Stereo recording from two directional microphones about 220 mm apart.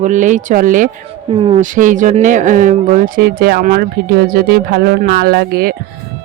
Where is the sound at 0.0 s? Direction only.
35° right (ahead or behind).